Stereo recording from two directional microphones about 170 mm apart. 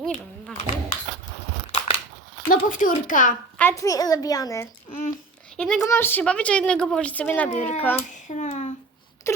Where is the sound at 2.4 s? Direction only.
55° left (ahead or behind).